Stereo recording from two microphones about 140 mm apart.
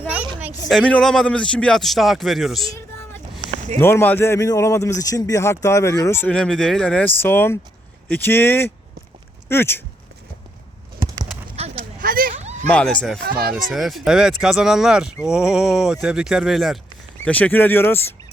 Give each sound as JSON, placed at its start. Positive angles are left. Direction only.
{"t": 0.7, "sound": "a man's voice", "side_deg": 5}
{"t": 2.7, "sound": "vehicle", "side_deg": 20}
{"t": 3.8, "sound": "speech", "side_deg": 15}
{"t": 6.3, "sound": "speech", "side_deg": 5}
{"t": 11.0, "sound": "clip-clop", "side_deg": -25}
{"t": 11.4, "sound": "clip-clop", "side_deg": -45}
{"t": 11.8, "sound": "a sound", "side_deg": -90}
{"t": 12.6, "sound": "a man's voice", "side_deg": 10}
{"t": 17.2, "sound": "speech", "side_deg": 10}